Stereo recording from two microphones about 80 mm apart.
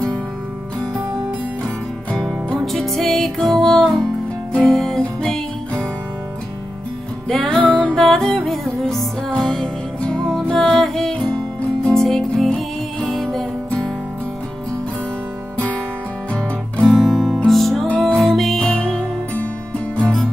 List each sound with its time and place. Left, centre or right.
2.1 s music: centre
7.2 s music: centre
15.5 s music: centre
16.7 s guitar: centre
17.5 s music: centre